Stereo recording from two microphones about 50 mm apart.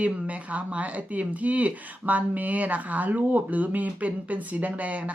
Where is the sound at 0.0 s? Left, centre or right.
Right.